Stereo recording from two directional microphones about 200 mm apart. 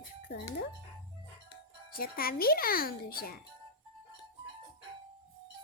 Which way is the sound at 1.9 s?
50° left (ahead or behind).